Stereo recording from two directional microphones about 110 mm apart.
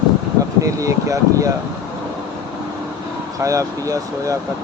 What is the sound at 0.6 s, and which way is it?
Speech, 30° right (ahead or behind).